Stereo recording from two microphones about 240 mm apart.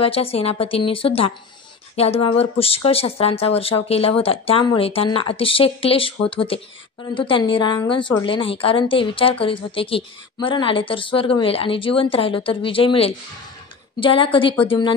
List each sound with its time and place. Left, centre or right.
0.0 s a woman's voice: left